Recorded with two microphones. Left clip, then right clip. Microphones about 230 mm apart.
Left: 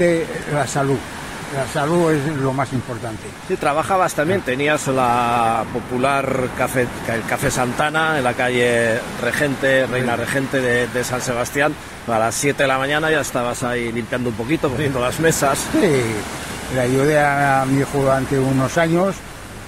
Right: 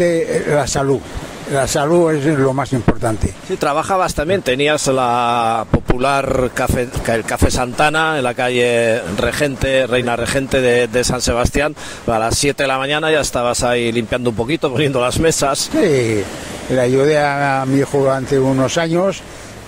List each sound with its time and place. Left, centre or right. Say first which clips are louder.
0.0 s speech: right 3 dB; right